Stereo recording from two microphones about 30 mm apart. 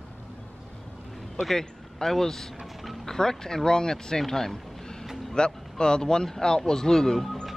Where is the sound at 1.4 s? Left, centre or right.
Centre.